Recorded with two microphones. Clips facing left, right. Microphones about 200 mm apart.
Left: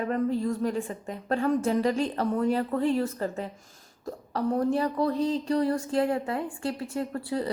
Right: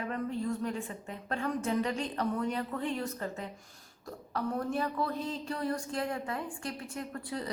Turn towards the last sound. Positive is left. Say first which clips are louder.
# left 8 dB
turn(degrees=30)  # may be behind; listen again after turning